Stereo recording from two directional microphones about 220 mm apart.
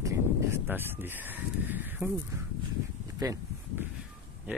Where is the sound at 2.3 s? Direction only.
10° right (ahead or behind).